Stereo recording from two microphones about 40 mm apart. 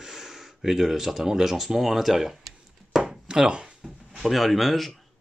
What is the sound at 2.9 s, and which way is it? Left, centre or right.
Chopping, centre.